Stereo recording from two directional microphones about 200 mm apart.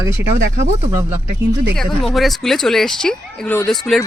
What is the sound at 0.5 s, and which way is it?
Speech, 35° right (ahead or behind).